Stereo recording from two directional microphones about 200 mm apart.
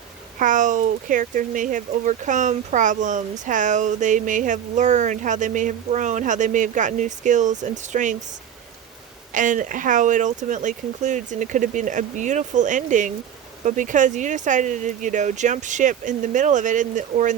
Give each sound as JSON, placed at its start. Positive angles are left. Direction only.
{"t": 0.3, "sound": "speech", "side_deg": -40}
{"t": 9.3, "sound": "speech", "side_deg": -40}